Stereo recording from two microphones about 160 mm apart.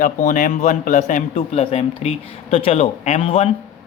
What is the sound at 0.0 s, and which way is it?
A man's voice, 55° left (ahead or behind).